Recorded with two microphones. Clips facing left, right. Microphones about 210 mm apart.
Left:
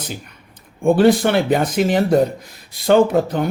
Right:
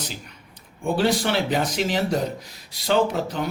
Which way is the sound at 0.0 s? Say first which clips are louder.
Left 4 dB; 50° left (ahead or behind).